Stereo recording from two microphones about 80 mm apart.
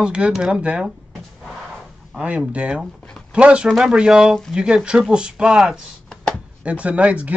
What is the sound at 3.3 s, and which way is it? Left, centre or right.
Speech, centre.